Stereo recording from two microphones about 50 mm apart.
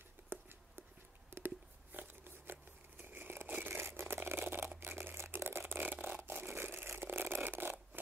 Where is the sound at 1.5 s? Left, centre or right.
Right.